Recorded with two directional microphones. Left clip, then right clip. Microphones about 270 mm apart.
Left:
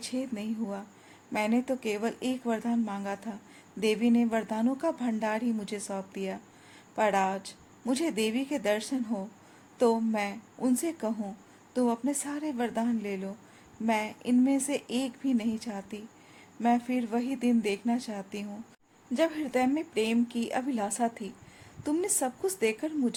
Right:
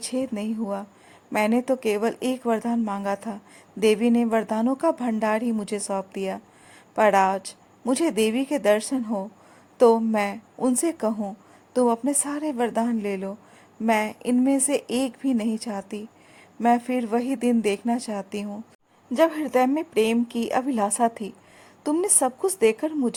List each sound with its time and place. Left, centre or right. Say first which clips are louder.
0.0 s a woman's voice: right 7 dB; right